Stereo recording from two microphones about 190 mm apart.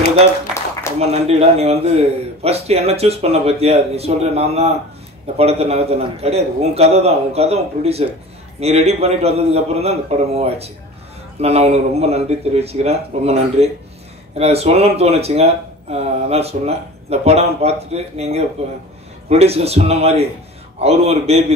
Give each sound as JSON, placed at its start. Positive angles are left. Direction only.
{"t": 0.9, "sound": "speech", "side_deg": -35}